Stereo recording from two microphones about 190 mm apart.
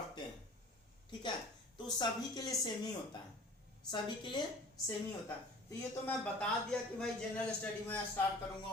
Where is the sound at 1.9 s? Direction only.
20° left (ahead or behind).